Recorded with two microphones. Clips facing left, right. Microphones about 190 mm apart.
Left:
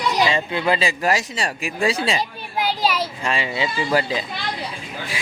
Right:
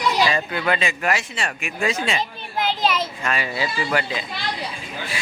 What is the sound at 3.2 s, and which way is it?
Speech, 30° left (ahead or behind).